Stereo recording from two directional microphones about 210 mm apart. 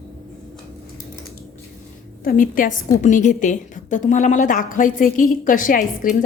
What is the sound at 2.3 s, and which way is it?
A woman's voice, 40° left (ahead or behind).